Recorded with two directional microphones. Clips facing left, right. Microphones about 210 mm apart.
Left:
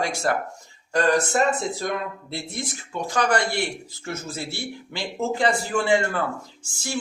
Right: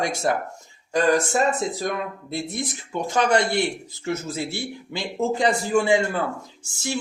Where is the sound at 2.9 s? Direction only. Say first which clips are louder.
Right 2 dB; 20° right (ahead or behind).